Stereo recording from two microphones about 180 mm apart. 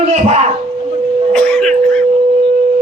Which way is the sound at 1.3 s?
5° left (ahead or behind).